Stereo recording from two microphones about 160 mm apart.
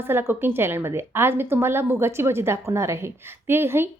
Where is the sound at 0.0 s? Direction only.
15° right (ahead or behind).